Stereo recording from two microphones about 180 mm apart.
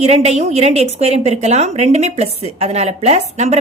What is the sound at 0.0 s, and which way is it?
A woman's voice, 35° right (ahead or behind).